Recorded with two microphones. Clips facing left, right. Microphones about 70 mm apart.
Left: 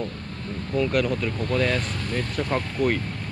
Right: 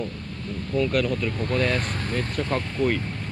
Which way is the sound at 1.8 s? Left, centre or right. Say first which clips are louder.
Right 1 dB; right.